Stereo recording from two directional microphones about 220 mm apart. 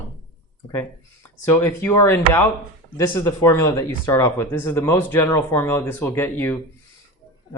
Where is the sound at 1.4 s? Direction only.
10° left (ahead or behind).